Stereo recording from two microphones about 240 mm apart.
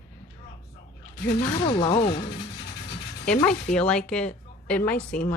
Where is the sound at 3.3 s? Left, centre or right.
Centre.